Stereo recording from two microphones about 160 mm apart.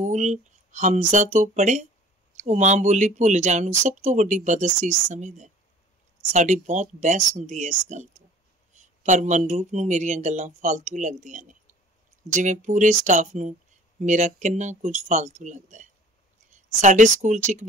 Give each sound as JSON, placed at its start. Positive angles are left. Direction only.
{"t": 0.0, "sound": "speech", "side_deg": -50}